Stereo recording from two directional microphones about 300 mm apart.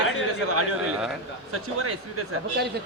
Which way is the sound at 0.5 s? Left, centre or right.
Right.